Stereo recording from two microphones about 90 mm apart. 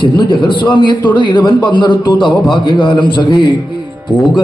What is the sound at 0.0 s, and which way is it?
A man's voice, 60° left (ahead or behind).